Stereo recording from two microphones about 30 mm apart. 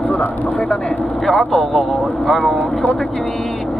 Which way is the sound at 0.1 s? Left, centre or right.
Left.